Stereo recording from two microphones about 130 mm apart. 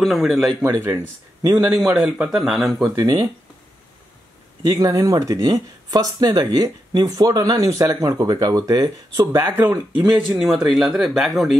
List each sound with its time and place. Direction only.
0.0 s speech: centre (ahead or behind)
0.6 s speech: 25° right (ahead or behind)
1.7 s speech: 5° right (ahead or behind)
3.0 s speech: 25° right (ahead or behind)
4.6 s speech: 25° right (ahead or behind)
9.5 s speech: 15° right (ahead or behind)
10.1 s speech: 5° right (ahead or behind)